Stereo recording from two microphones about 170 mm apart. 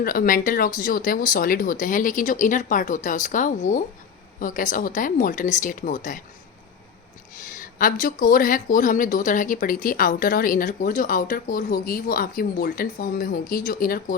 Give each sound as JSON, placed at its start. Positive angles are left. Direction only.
{"t": 0.0, "sound": "speech", "side_deg": 55}
{"t": 7.5, "sound": "speech", "side_deg": 55}